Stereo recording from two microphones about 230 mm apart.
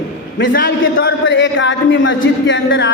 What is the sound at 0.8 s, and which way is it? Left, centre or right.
Speech, left.